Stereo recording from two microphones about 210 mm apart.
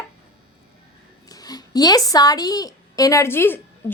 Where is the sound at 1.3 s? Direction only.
20° left (ahead or behind).